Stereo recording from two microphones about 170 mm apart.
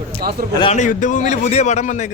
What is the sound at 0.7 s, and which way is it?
A man's voice, 50° left (ahead or behind).